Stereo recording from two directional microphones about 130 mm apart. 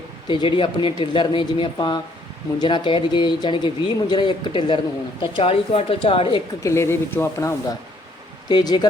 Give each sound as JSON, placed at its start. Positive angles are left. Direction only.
{"t": 0.3, "sound": "speech", "side_deg": 40}
{"t": 6.6, "sound": "speech", "side_deg": 20}
{"t": 8.4, "sound": "speech", "side_deg": 35}